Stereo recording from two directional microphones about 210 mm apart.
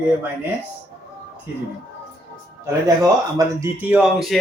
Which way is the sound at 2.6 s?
15° right (ahead or behind).